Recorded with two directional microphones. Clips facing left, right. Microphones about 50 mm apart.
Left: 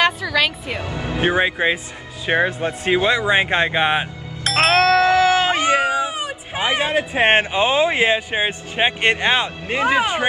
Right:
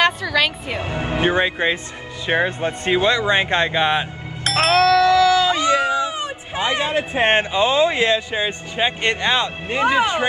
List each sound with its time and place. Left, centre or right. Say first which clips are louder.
0.0 s music: even; centre
0.8 s speech: right 4 dB; right
1.3 s speech: left 1 dB; centre
4.5 s music: left 1 dB; centre
5.0 s cat: right 1 dB; left
5.9 s cat: even; centre
6.5 s speech: left 1 dB; left